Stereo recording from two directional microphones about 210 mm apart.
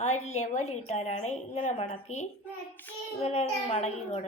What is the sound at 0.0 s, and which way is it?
A woman's voice, 30° left (ahead or behind).